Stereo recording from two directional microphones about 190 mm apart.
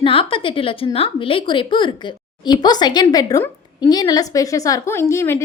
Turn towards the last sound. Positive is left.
turn(degrees=15)  # may be behind; listen again after turning